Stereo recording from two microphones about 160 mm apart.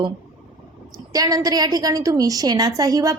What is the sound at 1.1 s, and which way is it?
A woman's voice, 20° right (ahead or behind).